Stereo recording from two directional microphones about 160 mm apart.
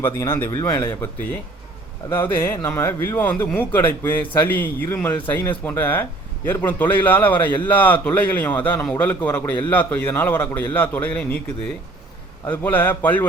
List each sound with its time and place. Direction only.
0.0 s a man's voice: 15° left (ahead or behind)
2.0 s a man's voice: 15° left (ahead or behind)
12.5 s a man's voice: 10° left (ahead or behind)